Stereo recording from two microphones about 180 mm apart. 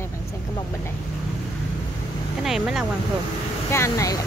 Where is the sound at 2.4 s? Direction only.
Centre (ahead or behind).